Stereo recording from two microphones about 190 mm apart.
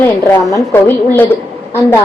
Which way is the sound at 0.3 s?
15° left (ahead or behind).